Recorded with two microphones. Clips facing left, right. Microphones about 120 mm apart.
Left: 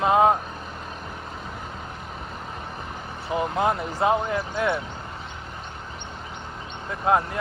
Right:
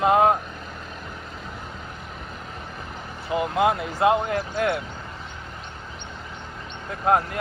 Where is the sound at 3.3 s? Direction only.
5° right (ahead or behind).